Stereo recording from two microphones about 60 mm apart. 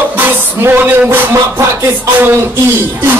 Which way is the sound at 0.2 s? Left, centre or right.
Right.